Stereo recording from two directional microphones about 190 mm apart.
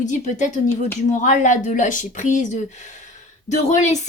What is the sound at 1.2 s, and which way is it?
Speech, 40° left (ahead or behind).